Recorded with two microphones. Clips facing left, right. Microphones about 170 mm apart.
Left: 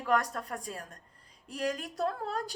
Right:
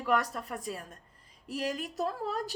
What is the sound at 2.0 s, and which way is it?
Speech, 5° right (ahead or behind).